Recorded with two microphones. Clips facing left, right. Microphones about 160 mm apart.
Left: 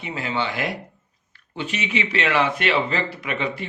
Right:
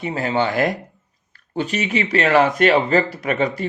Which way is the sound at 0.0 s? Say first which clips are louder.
Right 6 dB; 40° right (ahead or behind).